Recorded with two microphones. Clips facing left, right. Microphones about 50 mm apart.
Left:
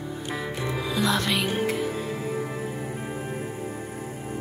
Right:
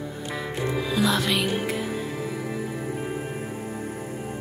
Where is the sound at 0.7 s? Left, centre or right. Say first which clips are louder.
Right 2 dB; centre.